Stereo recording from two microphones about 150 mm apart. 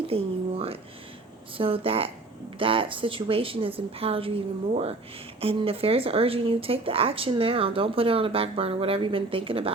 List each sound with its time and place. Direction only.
0.1 s speech: 40° right (ahead or behind)